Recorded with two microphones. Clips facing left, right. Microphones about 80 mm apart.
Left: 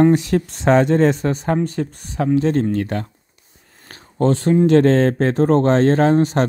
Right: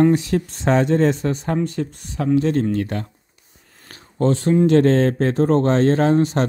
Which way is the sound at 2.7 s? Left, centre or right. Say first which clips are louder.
Left 1 dB; left.